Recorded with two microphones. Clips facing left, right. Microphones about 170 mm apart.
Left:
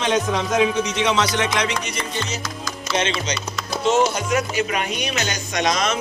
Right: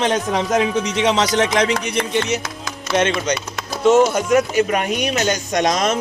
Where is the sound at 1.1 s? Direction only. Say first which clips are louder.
Right 4 dB; 45° right (ahead or behind).